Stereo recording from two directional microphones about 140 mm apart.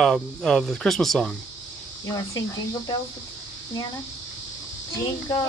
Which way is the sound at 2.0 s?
25° left (ahead or behind).